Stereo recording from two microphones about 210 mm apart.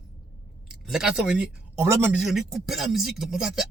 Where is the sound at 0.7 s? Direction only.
5° right (ahead or behind).